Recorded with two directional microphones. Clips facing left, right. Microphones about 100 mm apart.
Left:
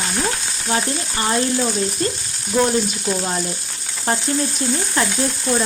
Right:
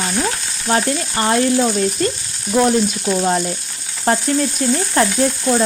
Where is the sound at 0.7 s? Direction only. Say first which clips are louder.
Right 5 dB; 40° right (ahead or behind).